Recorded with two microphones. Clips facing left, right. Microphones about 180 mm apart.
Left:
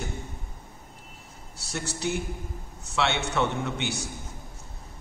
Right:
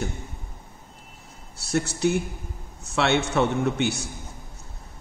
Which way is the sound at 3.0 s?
45° right (ahead or behind).